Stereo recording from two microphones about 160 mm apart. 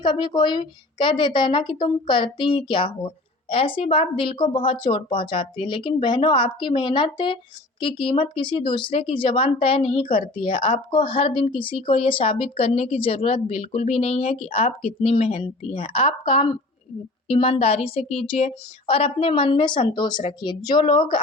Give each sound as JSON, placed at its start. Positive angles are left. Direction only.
{"t": 0.0, "sound": "speech", "side_deg": 30}